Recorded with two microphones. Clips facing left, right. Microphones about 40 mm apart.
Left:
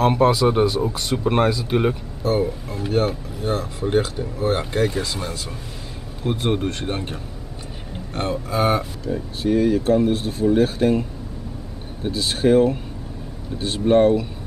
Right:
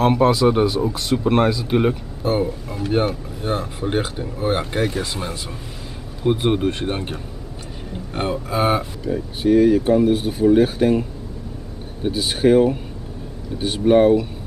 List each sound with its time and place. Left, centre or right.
0.0 s speech: centre
2.2 s speech: centre